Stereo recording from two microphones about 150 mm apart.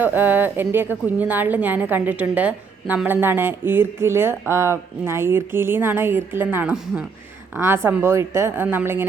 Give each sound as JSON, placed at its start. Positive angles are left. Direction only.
{"t": 0.0, "sound": "a woman's voice", "side_deg": -10}